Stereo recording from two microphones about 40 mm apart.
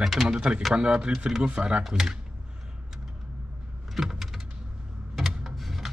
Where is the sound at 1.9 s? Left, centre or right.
Centre.